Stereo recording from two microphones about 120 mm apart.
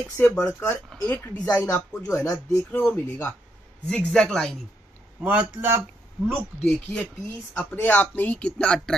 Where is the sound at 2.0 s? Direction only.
25° left (ahead or behind).